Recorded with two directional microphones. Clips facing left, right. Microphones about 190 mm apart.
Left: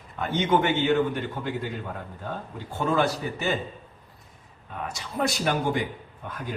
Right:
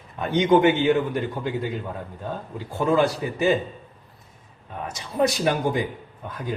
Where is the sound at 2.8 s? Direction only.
15° right (ahead or behind).